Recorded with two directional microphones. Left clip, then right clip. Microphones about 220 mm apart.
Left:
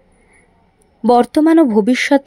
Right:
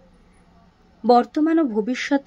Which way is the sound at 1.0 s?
30° left (ahead or behind).